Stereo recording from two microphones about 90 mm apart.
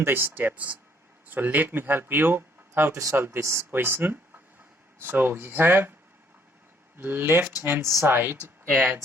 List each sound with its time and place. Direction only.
0.0 s speech: 20° right (ahead or behind)
6.9 s speech: 25° right (ahead or behind)